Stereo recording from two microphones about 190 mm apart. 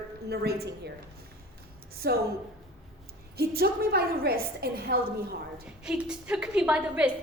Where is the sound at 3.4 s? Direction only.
55° right (ahead or behind).